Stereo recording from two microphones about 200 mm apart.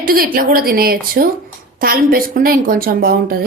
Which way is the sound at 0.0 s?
45° right (ahead or behind).